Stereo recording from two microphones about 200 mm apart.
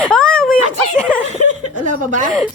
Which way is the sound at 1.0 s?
5° left (ahead or behind).